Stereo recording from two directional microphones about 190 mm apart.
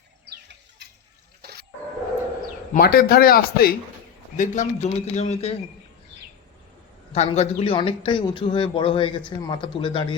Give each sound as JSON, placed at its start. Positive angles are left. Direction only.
{"t": 0.3, "sound": "a sound", "side_deg": -65}
{"t": 2.7, "sound": "speech", "side_deg": 50}
{"t": 4.4, "sound": "speech", "side_deg": 40}
{"t": 7.1, "sound": "a man's voice", "side_deg": 35}